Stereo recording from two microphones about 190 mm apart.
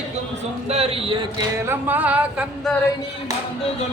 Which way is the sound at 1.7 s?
10° right (ahead or behind).